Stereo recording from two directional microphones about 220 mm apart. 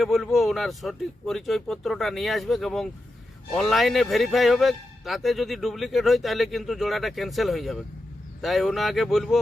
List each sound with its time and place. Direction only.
0.0 s speech: centre (ahead or behind)